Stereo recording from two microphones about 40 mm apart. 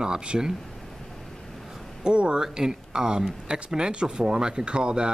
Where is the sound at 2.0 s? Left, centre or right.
Right.